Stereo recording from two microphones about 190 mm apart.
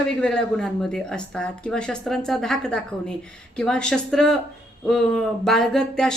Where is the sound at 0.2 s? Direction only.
5° left (ahead or behind).